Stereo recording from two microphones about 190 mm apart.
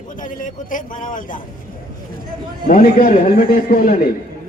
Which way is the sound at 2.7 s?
50° left (ahead or behind).